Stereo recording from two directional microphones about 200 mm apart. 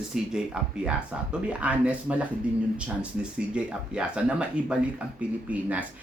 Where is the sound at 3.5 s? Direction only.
5° right (ahead or behind).